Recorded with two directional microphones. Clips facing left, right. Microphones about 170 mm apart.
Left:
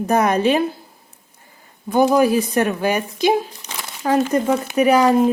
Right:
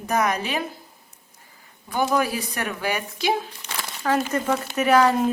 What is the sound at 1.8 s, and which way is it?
Speech, 20° left (ahead or behind).